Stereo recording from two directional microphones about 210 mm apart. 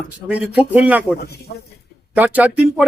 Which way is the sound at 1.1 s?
50° left (ahead or behind).